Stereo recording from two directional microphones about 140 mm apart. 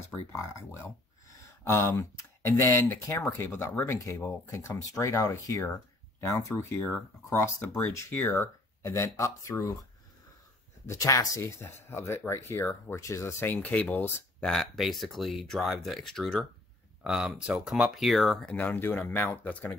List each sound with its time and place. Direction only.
0.3 s speech: 20° left (ahead or behind)
10.9 s speech: 25° left (ahead or behind)
14.5 s speech: centre (ahead or behind)